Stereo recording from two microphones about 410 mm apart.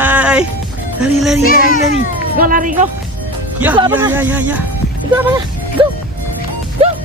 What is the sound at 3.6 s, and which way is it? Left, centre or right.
Speech, centre.